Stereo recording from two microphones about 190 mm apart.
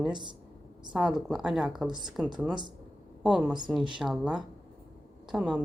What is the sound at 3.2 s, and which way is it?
Speech, 5° right (ahead or behind).